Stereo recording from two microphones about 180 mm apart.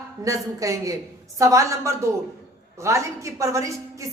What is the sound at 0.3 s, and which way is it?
A woman's voice, 20° right (ahead or behind).